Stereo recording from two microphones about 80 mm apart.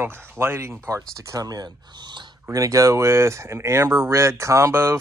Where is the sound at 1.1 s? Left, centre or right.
Right.